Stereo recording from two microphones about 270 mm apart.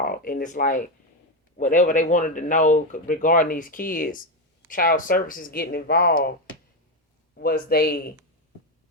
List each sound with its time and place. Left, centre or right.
0.0 s speech: left
7.3 s speech: left